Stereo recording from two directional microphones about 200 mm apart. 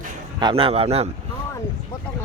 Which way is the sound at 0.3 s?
25° right (ahead or behind).